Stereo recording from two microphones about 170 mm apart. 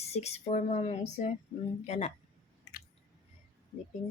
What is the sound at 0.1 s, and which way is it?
A woman's voice, 40° left (ahead or behind).